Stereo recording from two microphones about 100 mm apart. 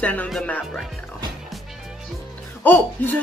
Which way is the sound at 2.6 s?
20° left (ahead or behind).